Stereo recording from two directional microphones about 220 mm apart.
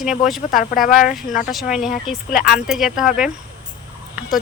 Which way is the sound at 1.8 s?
35° left (ahead or behind).